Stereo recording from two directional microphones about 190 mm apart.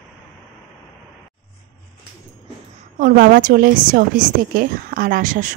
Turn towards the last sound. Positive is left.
turn(degrees=-45)  # may be behind; listen again after turning